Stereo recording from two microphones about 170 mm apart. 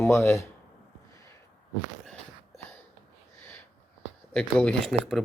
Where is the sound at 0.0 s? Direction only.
15° left (ahead or behind).